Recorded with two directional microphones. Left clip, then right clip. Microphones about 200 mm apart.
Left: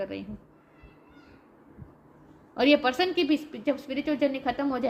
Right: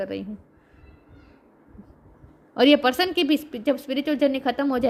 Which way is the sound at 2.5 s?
55° right (ahead or behind).